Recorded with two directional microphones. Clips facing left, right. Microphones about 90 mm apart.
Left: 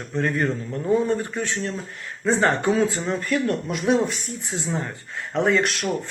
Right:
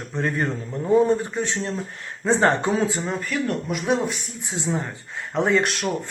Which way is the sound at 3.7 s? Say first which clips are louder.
Left 3 dB; centre (ahead or behind).